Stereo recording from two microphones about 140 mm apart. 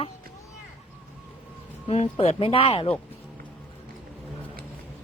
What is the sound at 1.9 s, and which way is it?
Speech, 50° left (ahead or behind).